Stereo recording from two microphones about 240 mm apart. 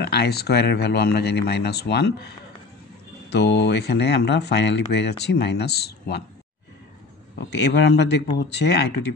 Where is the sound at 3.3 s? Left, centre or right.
Left.